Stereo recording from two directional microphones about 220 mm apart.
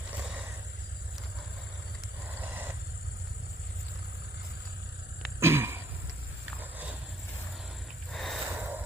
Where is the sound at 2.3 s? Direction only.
10° right (ahead or behind).